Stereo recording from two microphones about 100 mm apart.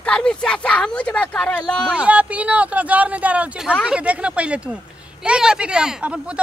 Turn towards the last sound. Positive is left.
turn(degrees=-10)  # may be behind; listen again after turning